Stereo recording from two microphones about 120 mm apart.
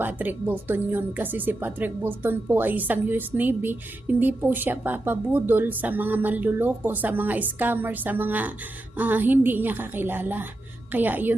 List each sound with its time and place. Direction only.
0.0 s speech: 15° right (ahead or behind)